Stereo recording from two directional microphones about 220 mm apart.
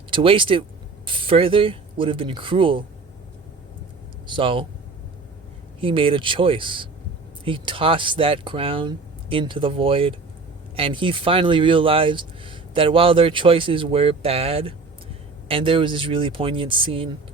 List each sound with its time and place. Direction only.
0.1 s speech: 25° right (ahead or behind)
4.3 s speech: 25° right (ahead or behind)
5.8 s speech: 25° right (ahead or behind)